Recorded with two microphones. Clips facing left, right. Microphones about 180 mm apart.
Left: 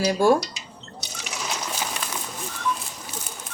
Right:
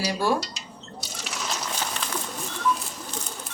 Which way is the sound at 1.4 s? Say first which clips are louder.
Left 1 dB; 10° left (ahead or behind).